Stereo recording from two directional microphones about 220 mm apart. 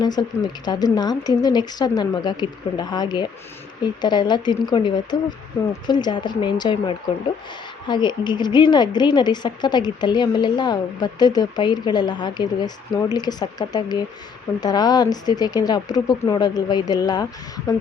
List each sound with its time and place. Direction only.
0.0 s a woman's voice: 20° left (ahead or behind)